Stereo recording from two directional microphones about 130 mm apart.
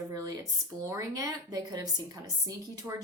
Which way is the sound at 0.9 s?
25° right (ahead or behind).